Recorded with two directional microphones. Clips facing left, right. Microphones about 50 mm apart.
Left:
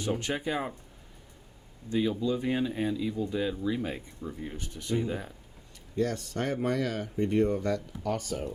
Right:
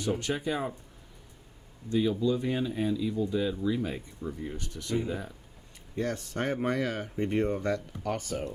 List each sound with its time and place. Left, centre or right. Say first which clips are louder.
0.0 s speech: right 1 dB; left
1.9 s speech: right 1 dB; left
6.0 s speech: left 1 dB; right